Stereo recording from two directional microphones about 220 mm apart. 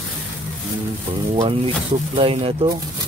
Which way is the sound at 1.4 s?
25° right (ahead or behind).